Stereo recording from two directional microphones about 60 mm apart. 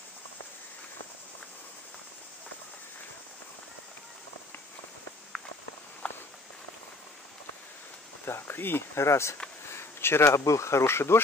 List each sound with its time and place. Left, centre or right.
6.0 s walk: left
8.3 s speech: left
9.0 s speech: left